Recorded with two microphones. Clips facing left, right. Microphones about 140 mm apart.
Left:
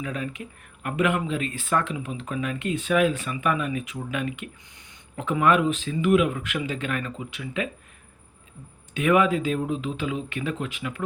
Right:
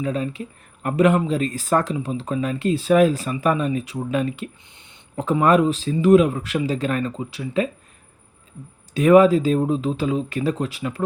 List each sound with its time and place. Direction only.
0.0 s speech: 30° right (ahead or behind)
9.0 s speech: 35° right (ahead or behind)